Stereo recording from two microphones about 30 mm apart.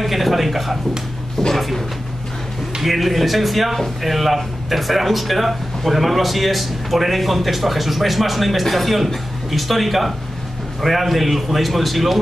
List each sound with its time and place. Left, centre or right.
0.0 s speech: centre
2.8 s speech: centre